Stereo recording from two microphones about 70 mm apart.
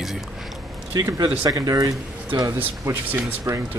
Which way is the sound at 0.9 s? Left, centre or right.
Right.